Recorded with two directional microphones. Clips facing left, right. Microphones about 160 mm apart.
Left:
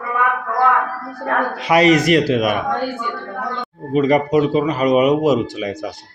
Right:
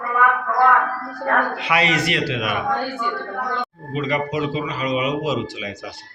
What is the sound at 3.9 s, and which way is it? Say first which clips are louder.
Speech: left 8 dB; 45° left (ahead or behind).